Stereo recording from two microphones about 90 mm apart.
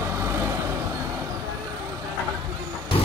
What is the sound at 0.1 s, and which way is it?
Vehicle, 30° right (ahead or behind).